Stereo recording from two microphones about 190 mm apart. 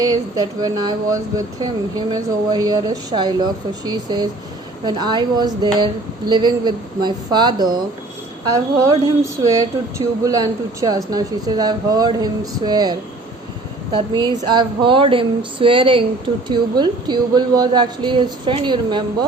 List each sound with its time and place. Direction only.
0.0 s speech: 20° right (ahead or behind)